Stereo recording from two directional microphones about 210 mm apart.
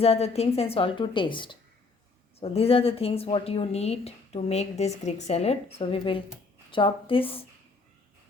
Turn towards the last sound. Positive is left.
turn(degrees=25)  # may be behind; listen again after turning